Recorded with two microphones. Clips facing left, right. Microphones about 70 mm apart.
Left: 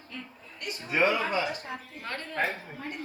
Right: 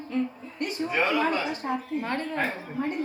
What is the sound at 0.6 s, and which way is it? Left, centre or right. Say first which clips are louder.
Speech: right 10 dB; right.